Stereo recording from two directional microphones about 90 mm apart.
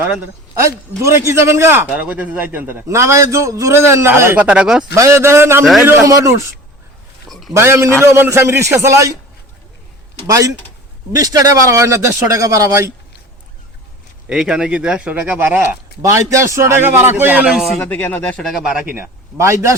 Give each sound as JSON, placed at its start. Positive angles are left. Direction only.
{"t": 0.5, "sound": "a man's voice", "side_deg": -35}
{"t": 2.0, "sound": "a man's voice", "side_deg": -15}
{"t": 4.4, "sound": "speech", "side_deg": -10}
{"t": 4.9, "sound": "a man's voice", "side_deg": -35}
{"t": 6.1, "sound": "a man's voice", "side_deg": -40}
{"t": 7.3, "sound": "a sound", "side_deg": 0}
{"t": 7.5, "sound": "a man's voice", "side_deg": -30}
{"t": 10.2, "sound": "a man's voice", "side_deg": -40}
{"t": 14.3, "sound": "speech", "side_deg": -10}
{"t": 16.0, "sound": "a man's voice", "side_deg": -35}
{"t": 17.5, "sound": "speech", "side_deg": 0}
{"t": 17.7, "sound": "speech", "side_deg": 20}
{"t": 18.4, "sound": "speech", "side_deg": -5}
{"t": 19.4, "sound": "a man's voice", "side_deg": -35}